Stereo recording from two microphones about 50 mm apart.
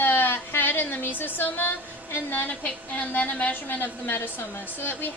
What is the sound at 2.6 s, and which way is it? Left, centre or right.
A woman's voice, left.